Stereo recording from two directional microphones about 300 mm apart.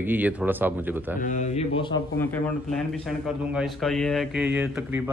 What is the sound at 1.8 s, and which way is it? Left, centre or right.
A man's voice, centre.